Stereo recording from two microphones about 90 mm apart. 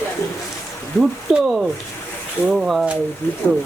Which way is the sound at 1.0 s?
5° right (ahead or behind).